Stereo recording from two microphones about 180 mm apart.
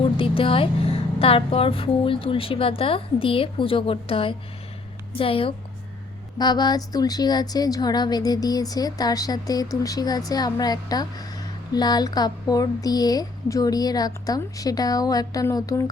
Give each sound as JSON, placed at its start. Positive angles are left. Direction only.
{"t": 0.0, "sound": "a woman's voice", "side_deg": 30}